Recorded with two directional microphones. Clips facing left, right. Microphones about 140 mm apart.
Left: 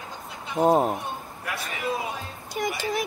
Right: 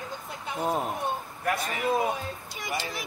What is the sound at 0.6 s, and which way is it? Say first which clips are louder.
Speech: left 9 dB; 40° left (ahead or behind).